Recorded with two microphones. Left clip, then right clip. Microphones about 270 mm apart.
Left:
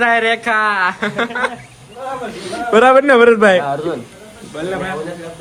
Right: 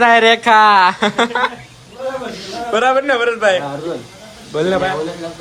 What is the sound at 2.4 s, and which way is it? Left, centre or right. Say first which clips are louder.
A man's voice: left 5 dB; left.